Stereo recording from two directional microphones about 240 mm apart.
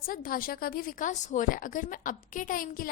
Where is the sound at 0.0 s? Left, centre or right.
Left.